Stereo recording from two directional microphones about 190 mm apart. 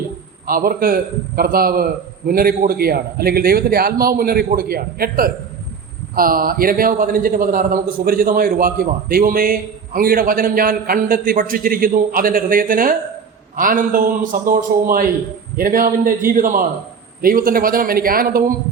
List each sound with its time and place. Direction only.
0.4 s a man's voice: 50° right (ahead or behind)